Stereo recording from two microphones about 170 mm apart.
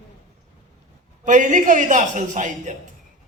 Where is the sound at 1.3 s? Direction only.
45° right (ahead or behind).